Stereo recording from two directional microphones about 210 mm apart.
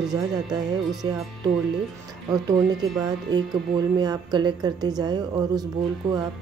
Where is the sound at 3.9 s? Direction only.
20° right (ahead or behind).